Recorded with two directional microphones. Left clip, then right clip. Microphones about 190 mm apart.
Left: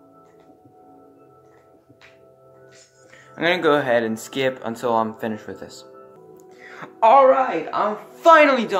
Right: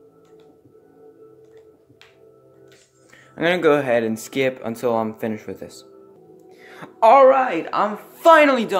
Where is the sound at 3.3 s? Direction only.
35° right (ahead or behind).